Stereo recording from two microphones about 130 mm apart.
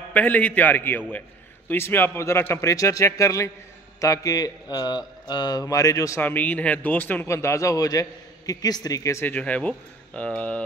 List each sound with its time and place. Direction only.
0.1 s a man's voice: 10° left (ahead or behind)
6.2 s speech: 15° left (ahead or behind)